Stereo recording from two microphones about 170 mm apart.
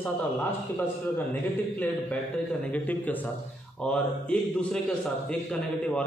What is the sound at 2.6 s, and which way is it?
A man's voice, 10° left (ahead or behind).